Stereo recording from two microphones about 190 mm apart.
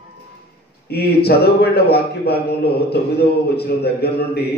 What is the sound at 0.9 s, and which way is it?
A man's voice, 55° left (ahead or behind).